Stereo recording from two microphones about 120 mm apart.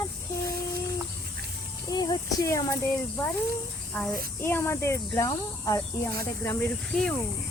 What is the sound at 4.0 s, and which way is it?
A child's voice, 10° left (ahead or behind).